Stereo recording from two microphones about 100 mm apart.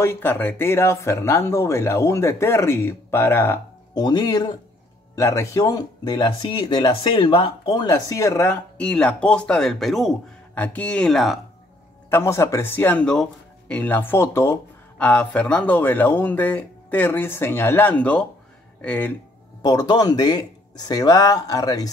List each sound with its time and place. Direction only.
0.0 s speech: 25° left (ahead or behind)
3.9 s speech: 45° left (ahead or behind)
5.1 s speech: 30° left (ahead or behind)
6.4 s speech: 55° left (ahead or behind)
7.9 s speech: 35° left (ahead or behind)
8.7 s speech: 10° left (ahead or behind)
10.5 s speech: 15° left (ahead or behind)
12.1 s speech: 25° left (ahead or behind)
15.0 s speech: 10° left (ahead or behind)
19.6 s speech: 45° left (ahead or behind)